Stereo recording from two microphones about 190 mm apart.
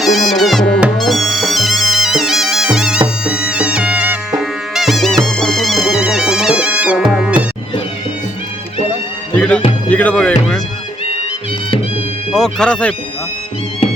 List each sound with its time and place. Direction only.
0.0 s music: centre (ahead or behind)
7.1 s cat: 5° right (ahead or behind)
9.3 s music: 5° left (ahead or behind)
12.3 s speech: 5° left (ahead or behind)